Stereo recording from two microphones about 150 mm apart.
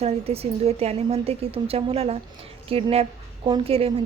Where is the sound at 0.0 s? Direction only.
45° right (ahead or behind).